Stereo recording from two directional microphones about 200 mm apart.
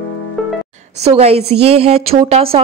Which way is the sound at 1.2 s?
30° right (ahead or behind).